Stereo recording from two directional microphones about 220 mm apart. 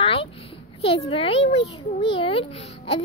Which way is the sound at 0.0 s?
25° left (ahead or behind).